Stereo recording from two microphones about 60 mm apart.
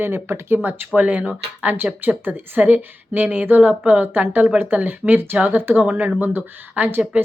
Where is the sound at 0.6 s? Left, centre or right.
Right.